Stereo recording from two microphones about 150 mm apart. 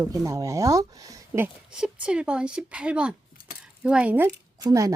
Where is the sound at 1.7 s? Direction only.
5° right (ahead or behind).